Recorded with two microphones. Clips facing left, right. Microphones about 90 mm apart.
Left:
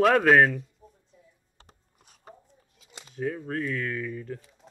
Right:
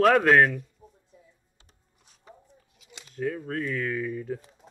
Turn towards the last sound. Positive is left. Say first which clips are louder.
# right 3 dB
turn(degrees=-10)  # may be behind; listen again after turning